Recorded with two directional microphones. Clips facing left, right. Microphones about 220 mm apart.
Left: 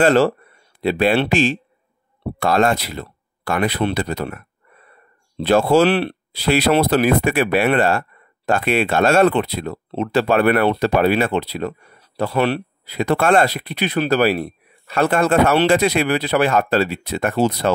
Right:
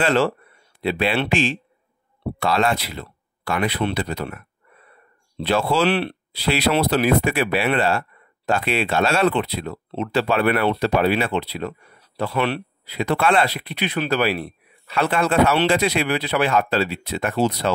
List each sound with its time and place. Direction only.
0.0 s speech: 40° left (ahead or behind)